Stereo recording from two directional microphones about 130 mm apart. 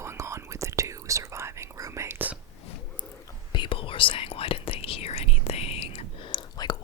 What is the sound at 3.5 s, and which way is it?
Whispering, 40° left (ahead or behind).